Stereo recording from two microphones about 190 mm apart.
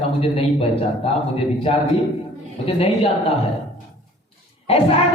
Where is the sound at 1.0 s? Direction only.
30° left (ahead or behind).